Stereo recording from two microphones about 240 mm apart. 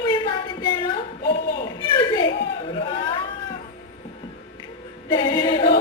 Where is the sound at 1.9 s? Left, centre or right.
Centre.